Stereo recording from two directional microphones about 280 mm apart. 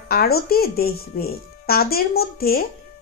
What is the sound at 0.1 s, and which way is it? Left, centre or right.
Speech, left.